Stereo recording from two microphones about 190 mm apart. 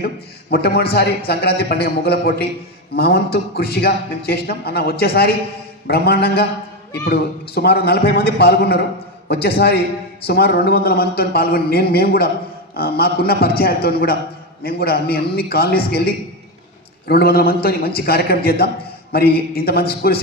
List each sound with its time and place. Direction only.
0.5 s a man's voice: 55° left (ahead or behind)